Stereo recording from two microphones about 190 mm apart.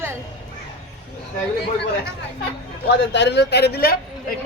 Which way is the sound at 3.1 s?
65° left (ahead or behind).